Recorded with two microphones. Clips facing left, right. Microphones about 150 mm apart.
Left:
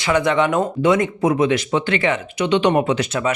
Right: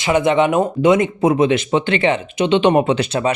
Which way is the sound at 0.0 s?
20° right (ahead or behind).